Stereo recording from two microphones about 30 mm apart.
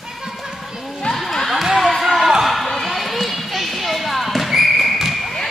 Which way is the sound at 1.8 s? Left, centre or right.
Centre.